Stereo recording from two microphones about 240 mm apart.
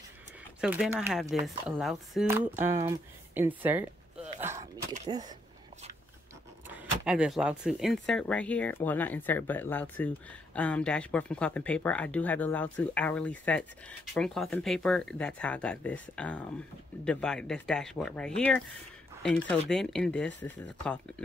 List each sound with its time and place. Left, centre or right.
0.6 s speech: centre
4.4 s a sound: centre
5.1 s speech: centre
6.7 s speech: centre